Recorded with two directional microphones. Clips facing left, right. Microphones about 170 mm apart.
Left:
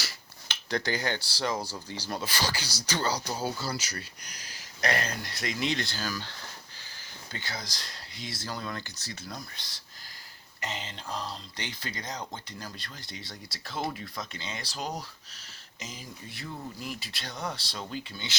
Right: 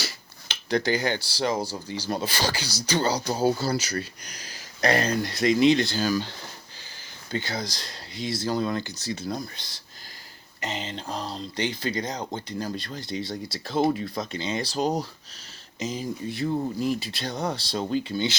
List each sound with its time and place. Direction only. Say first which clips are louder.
0.0 s cutlery: right 7 dB; 15° right (ahead or behind)
1.7 s speech: right 6 dB; 15° right (ahead or behind)
4.8 s speech: right 7 dB; 35° right (ahead or behind)
7.3 s speech: right 10 dB; 25° right (ahead or behind)
10.6 s speech: right 6 dB; 25° right (ahead or behind)